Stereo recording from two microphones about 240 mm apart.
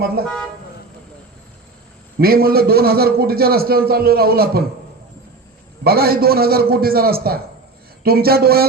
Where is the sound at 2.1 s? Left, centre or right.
Right.